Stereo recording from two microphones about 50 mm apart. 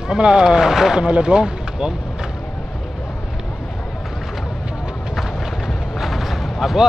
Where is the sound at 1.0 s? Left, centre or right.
Centre.